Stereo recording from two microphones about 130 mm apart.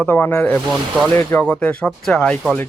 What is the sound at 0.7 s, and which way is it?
Speech, centre (ahead or behind).